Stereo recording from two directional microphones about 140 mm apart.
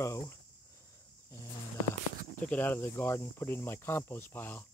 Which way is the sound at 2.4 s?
10° left (ahead or behind).